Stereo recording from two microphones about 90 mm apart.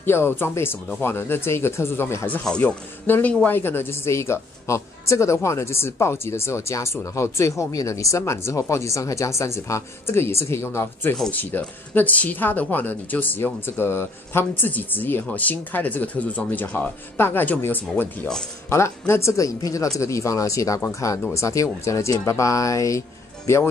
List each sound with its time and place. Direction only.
0.0 s speech: 25° left (ahead or behind)
2.4 s speech: 10° left (ahead or behind)
18.7 s speech: 30° left (ahead or behind)